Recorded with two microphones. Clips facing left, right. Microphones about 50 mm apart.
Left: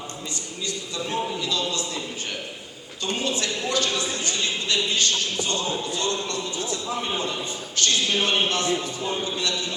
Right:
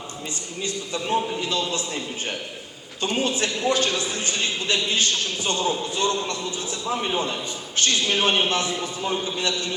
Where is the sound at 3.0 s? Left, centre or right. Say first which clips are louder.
Right 3 dB; right.